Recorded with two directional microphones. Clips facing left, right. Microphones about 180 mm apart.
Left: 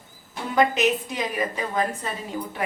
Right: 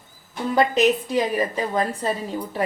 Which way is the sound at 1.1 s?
30° right (ahead or behind).